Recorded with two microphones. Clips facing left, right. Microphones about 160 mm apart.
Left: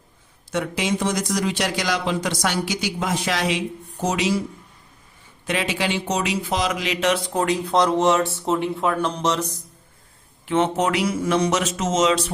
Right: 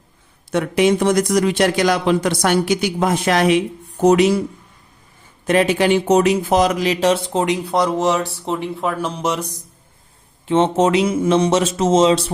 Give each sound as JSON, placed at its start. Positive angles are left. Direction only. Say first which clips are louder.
{"t": 0.5, "sound": "a man's voice", "louder": "right 8 dB", "side_deg": -60}
{"t": 5.5, "sound": "speech", "louder": "right 9 dB", "side_deg": -50}
{"t": 10.4, "sound": "speech", "louder": "right 5 dB", "side_deg": -25}